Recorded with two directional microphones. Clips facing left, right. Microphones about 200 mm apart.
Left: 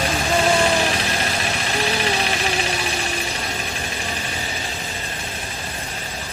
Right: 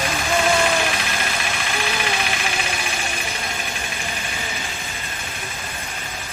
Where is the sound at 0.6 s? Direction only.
35° left (ahead or behind).